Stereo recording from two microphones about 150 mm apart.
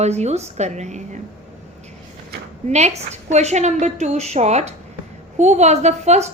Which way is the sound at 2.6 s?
50° right (ahead or behind).